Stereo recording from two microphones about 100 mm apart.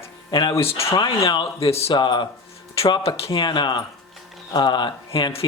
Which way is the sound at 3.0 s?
75° left (ahead or behind).